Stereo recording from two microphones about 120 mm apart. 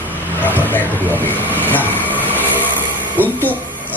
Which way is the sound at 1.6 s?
15° left (ahead or behind).